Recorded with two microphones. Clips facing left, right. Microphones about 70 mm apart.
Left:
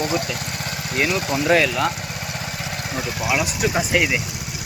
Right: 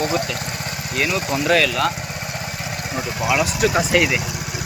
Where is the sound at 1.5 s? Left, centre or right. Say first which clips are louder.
Even; left.